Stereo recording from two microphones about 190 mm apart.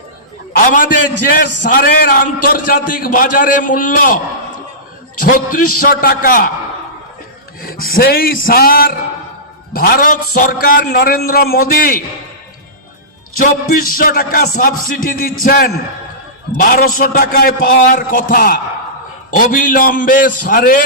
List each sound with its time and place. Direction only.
0.5 s a man's voice: 45° left (ahead or behind)
5.2 s a man's voice: 45° left (ahead or behind)
7.6 s a man's voice: 50° left (ahead or behind)
13.4 s a man's voice: 50° left (ahead or behind)